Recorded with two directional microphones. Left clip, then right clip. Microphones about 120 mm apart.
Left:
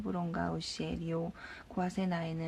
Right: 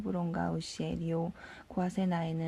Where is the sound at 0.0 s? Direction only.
30° right (ahead or behind).